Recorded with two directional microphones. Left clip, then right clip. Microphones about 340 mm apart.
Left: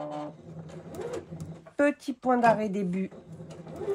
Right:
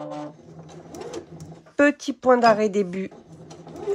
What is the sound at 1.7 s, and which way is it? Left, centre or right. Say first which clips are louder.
Speech: right 6 dB; right.